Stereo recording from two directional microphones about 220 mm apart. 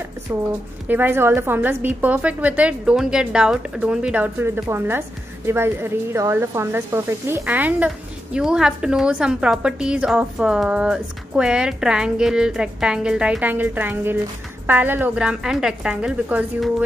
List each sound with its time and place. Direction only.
0.3 s a woman's voice: 10° right (ahead or behind)